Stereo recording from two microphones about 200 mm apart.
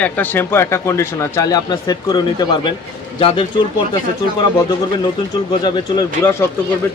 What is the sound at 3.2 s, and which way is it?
Speech, 25° left (ahead or behind).